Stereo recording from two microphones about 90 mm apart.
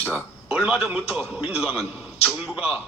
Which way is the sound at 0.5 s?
5° right (ahead or behind).